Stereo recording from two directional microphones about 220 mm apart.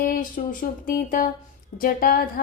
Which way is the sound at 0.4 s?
40° left (ahead or behind).